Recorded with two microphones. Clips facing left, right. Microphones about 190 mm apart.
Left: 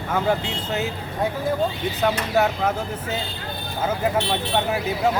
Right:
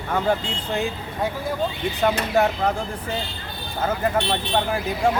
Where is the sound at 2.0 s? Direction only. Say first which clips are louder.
Right 1 dB; centre (ahead or behind).